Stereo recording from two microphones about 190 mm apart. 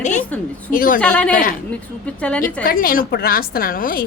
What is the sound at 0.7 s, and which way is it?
Speech, 45° left (ahead or behind).